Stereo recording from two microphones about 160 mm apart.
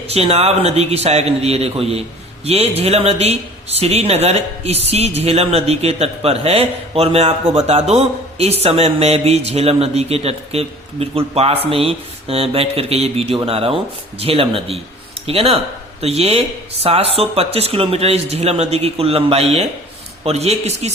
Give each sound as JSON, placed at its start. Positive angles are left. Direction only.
{"t": 0.1, "sound": "a man's voice", "side_deg": -40}